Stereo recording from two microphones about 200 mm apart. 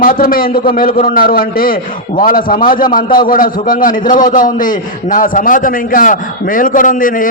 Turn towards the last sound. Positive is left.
turn(degrees=40)  # may be behind; listen again after turning